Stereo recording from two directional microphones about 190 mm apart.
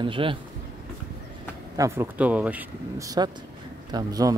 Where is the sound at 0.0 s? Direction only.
25° right (ahead or behind).